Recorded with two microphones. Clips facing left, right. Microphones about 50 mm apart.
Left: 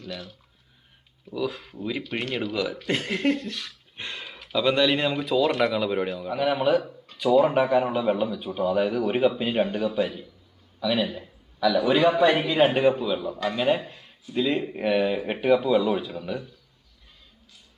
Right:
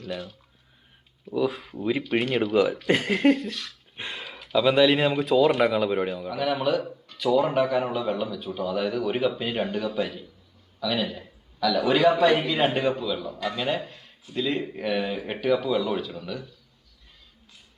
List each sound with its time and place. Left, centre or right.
0.0 s speech: centre
1.3 s speech: centre
1.6 s speech: centre
3.5 s a man's voice: centre
3.9 s a sound: centre
4.3 s speech: centre
6.3 s a man's voice: centre